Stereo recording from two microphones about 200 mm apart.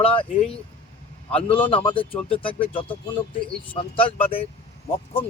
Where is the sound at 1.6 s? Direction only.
25° left (ahead or behind).